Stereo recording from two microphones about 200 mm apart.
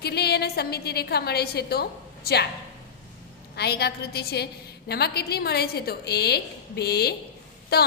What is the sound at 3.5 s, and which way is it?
A woman's voice, 55° left (ahead or behind).